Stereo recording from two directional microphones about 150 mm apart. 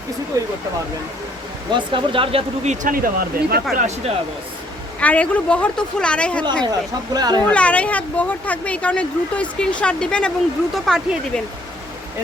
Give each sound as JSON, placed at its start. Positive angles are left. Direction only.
{"t": 1.7, "sound": "speech", "side_deg": -35}
{"t": 2.8, "sound": "speech", "side_deg": -70}
{"t": 3.8, "sound": "speech", "side_deg": -50}
{"t": 4.9, "sound": "speech", "side_deg": 10}
{"t": 6.7, "sound": "speech", "side_deg": -25}
{"t": 7.5, "sound": "speech", "side_deg": 10}